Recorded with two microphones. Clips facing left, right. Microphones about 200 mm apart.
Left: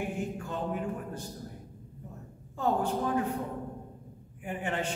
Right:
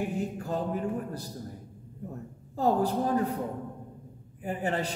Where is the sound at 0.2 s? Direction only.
35° right (ahead or behind).